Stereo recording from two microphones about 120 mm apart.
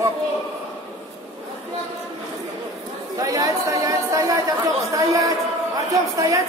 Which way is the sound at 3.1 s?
30° right (ahead or behind).